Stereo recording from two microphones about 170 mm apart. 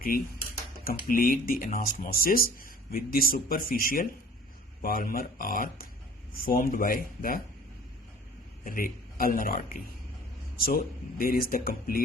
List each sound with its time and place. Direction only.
0.1 s speech: 60° left (ahead or behind)
8.6 s speech: 55° left (ahead or behind)